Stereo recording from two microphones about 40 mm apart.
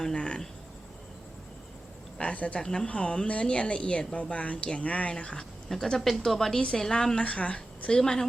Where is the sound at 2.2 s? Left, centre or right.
Left.